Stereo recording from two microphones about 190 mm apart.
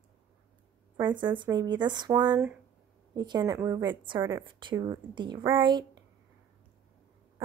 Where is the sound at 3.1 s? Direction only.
20° right (ahead or behind).